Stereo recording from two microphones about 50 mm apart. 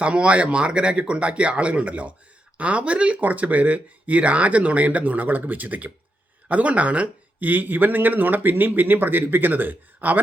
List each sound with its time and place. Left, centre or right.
0.0 s a man's voice: right